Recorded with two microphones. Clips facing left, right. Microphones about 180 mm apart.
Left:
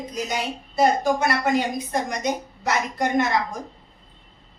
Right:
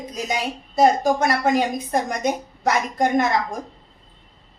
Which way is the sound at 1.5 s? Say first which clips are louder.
Right 2 dB; 50° right (ahead or behind).